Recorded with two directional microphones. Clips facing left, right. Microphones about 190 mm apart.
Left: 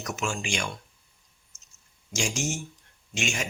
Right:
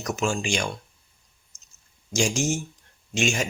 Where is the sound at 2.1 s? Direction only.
35° right (ahead or behind).